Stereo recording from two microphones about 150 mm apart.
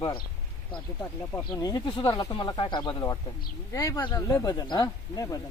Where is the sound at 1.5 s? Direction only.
25° left (ahead or behind).